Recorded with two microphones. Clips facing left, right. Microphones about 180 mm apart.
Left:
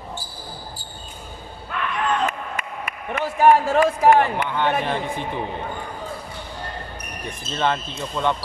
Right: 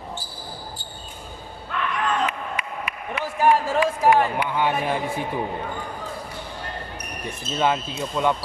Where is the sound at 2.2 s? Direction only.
45° left (ahead or behind).